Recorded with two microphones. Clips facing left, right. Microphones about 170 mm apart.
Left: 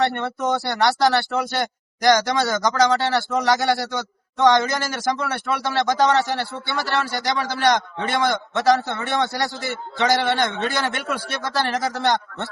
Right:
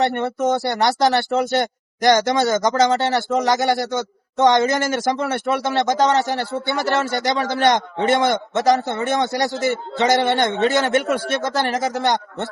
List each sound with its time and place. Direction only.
0.0 s a man's voice: 20° right (ahead or behind)